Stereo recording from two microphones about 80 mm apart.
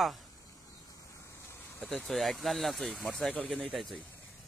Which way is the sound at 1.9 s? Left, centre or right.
Centre.